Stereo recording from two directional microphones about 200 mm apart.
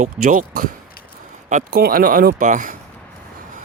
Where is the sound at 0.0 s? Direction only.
40° right (ahead or behind).